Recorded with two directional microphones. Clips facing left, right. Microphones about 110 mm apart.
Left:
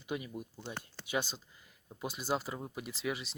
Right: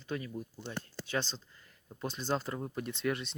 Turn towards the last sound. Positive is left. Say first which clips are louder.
# right 4 dB
turn(degrees=5)  # may be behind; listen again after turning